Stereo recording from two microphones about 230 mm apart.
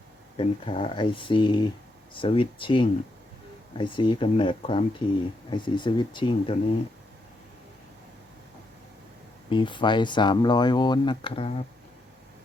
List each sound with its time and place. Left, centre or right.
0.3 s speech: left
9.5 s speech: left